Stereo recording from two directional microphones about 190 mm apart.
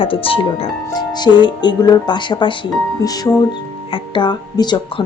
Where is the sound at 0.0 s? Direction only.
30° left (ahead or behind).